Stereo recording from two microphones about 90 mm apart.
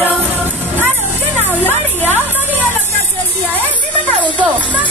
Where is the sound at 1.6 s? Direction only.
20° left (ahead or behind).